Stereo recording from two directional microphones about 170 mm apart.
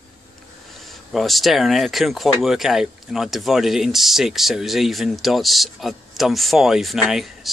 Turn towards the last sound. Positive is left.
turn(degrees=0)  # may be behind; listen again after turning